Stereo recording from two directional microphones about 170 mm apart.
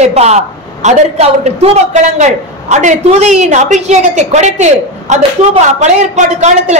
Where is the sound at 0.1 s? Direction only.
40° right (ahead or behind).